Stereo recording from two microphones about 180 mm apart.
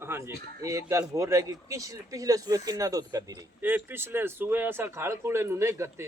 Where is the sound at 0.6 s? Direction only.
15° right (ahead or behind).